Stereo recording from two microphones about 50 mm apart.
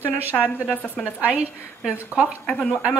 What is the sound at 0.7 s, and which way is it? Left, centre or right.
Speech, left.